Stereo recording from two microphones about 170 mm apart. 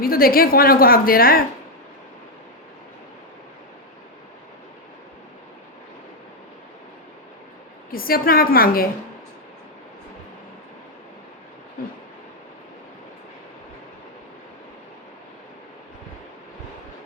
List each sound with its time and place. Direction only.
0.0 s a woman's voice: 60° left (ahead or behind)
7.9 s a woman's voice: 60° left (ahead or behind)